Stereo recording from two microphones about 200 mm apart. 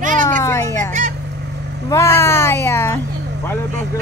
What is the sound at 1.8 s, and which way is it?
Speech, 15° left (ahead or behind).